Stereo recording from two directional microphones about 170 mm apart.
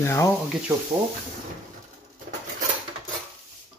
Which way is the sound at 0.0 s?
15° left (ahead or behind).